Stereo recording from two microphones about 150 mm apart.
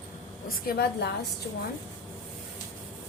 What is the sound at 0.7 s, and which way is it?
Speech, 90° left.